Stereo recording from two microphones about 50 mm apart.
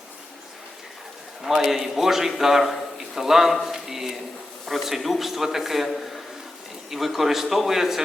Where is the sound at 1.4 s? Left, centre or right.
Centre.